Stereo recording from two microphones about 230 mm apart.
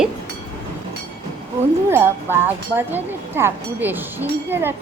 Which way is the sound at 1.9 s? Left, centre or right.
Centre.